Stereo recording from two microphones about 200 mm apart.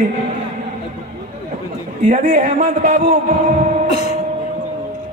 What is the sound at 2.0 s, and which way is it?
A man's voice, 40° right (ahead or behind).